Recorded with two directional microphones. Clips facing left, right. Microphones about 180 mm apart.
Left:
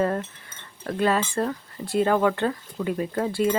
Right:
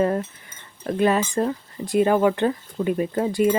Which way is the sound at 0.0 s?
15° right (ahead or behind).